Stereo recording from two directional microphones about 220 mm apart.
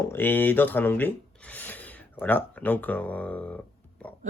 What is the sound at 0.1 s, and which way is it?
Speech, 10° left (ahead or behind).